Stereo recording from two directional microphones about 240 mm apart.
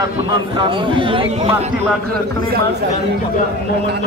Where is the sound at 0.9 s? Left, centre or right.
Right.